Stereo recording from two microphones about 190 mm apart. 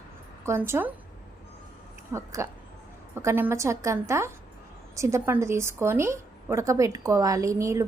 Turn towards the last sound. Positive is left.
turn(degrees=-15)  # may be behind; listen again after turning